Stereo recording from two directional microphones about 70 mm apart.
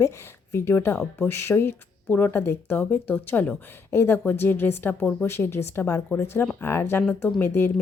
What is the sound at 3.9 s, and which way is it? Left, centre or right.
A woman's voice, left.